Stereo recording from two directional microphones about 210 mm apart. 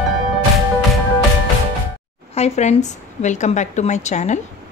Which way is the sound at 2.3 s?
30° left (ahead or behind).